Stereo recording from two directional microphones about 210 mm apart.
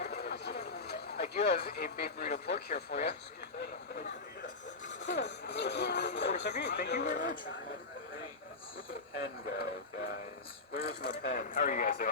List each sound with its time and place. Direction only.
0.0 s a sound: 50° left (ahead or behind)
1.2 s speech: 40° left (ahead or behind)
5.0 s speech: 55° left (ahead or behind)
7.0 s speech: 40° left (ahead or behind)
9.2 s speech: 45° left (ahead or behind)